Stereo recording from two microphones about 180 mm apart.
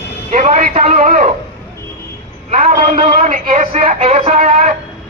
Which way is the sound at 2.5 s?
40° right (ahead or behind).